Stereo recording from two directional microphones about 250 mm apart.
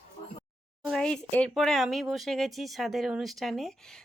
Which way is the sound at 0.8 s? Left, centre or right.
Centre.